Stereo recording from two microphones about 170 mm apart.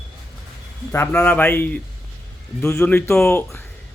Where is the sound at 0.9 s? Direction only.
10° left (ahead or behind).